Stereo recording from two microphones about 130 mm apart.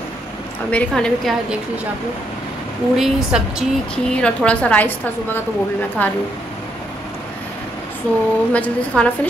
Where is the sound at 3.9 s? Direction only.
5° left (ahead or behind).